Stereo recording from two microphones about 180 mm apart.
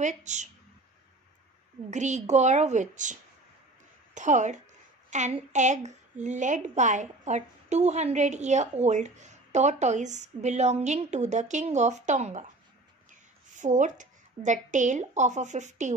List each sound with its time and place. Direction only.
0.0 s a woman's voice: 40° right (ahead or behind)
1.9 s a woman's voice: 40° right (ahead or behind)
13.5 s a woman's voice: 45° right (ahead or behind)